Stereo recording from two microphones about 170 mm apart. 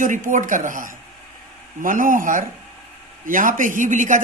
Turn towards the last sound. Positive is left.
turn(degrees=-50)  # may be behind; listen again after turning